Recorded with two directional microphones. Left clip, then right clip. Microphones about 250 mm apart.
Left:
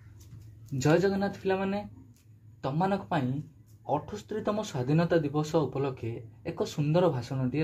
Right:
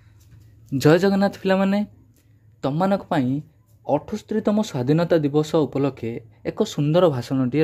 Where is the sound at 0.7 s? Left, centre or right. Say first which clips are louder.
Right 9 dB; right.